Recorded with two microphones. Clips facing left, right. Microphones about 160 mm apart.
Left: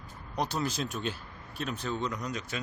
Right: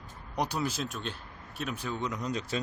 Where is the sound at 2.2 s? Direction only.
30° right (ahead or behind).